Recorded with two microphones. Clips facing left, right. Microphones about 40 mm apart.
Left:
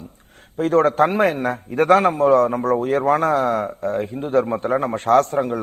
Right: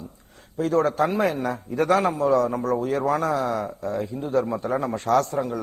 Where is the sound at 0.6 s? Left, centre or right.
Left.